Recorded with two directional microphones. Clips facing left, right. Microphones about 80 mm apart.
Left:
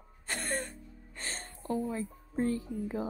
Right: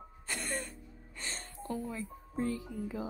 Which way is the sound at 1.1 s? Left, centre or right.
Left.